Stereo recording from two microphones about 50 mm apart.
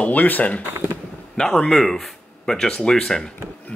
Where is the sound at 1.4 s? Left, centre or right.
Centre.